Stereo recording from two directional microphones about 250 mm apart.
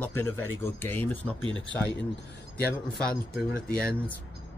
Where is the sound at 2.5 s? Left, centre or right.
Left.